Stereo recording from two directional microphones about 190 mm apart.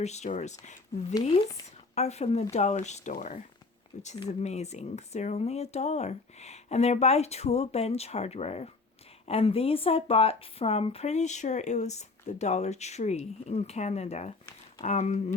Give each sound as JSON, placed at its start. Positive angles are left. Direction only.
{"t": 0.0, "sound": "speech", "side_deg": 35}
{"t": 2.0, "sound": "speech", "side_deg": 35}